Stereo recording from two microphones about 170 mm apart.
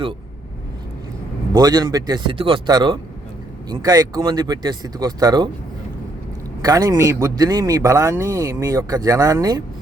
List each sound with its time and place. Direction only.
1.5 s a man's voice: 20° right (ahead or behind)
6.6 s a man's voice: 20° right (ahead or behind)